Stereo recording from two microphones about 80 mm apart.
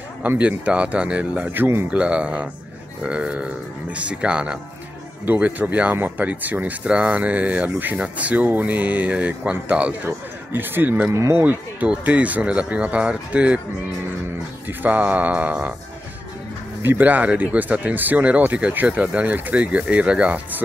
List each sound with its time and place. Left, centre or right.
0.2 s speech: centre
1.9 s a man's voice: centre
11.1 s speech: right
12.0 s speech: centre
14.7 s speech: right
16.8 s speech: right